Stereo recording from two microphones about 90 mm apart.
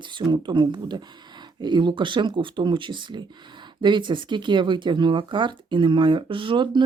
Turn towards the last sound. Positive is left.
turn(degrees=-65)  # may be behind; listen again after turning